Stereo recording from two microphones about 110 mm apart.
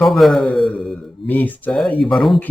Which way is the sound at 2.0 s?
Centre (ahead or behind).